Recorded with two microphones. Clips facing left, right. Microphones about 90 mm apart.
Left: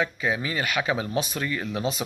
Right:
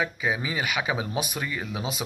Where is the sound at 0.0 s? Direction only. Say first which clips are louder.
Left 1 dB; 10° right (ahead or behind).